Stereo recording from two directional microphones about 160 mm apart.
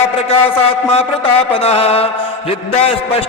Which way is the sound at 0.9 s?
35° left (ahead or behind).